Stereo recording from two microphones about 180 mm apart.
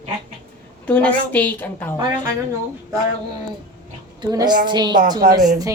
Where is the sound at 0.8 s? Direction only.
10° left (ahead or behind).